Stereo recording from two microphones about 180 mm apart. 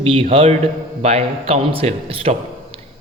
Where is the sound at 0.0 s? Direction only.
30° right (ahead or behind).